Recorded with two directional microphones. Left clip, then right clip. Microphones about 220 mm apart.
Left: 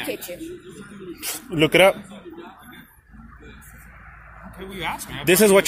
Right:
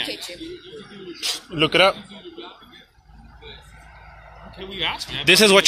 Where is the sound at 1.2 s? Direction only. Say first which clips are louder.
Even; 25° left (ahead or behind).